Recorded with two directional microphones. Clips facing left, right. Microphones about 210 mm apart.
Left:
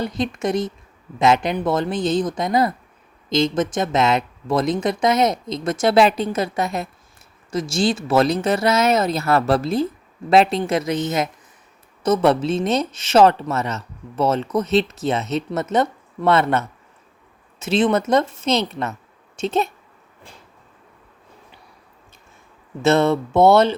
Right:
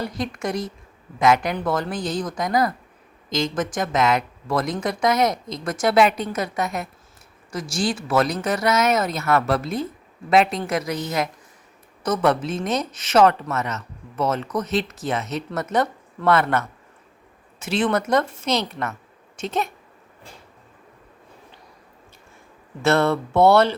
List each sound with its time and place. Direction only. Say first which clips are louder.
0.0 s speech: left 4 dB; 20° left (ahead or behind)
22.8 s speech: left 3 dB; 20° left (ahead or behind)